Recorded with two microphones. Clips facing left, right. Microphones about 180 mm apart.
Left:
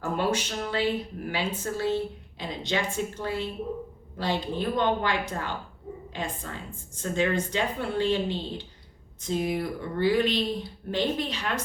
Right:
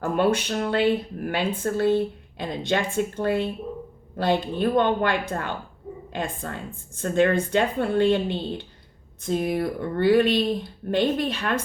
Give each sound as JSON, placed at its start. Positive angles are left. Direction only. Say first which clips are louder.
{"t": 0.0, "sound": "speech", "louder": "right 5 dB", "side_deg": -60}